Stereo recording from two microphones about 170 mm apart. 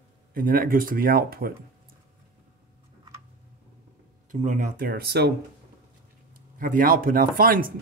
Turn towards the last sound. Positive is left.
turn(degrees=-55)  # may be behind; listen again after turning